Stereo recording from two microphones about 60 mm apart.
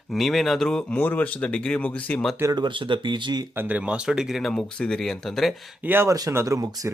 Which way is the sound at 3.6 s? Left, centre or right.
Right.